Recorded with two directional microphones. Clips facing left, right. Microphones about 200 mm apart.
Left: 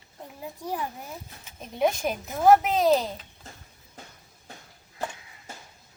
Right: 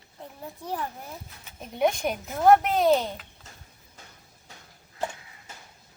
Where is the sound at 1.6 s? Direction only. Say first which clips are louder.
Even; centre (ahead or behind).